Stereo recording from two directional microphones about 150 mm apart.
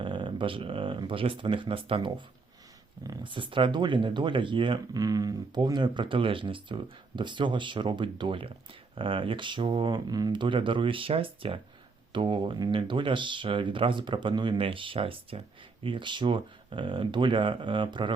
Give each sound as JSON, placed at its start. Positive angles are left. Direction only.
{"t": 0.0, "sound": "speech", "side_deg": -35}